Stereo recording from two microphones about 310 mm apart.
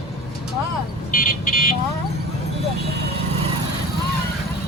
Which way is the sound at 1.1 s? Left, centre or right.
Left.